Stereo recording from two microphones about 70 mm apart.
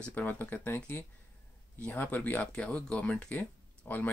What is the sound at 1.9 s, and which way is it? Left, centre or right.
Speech, left.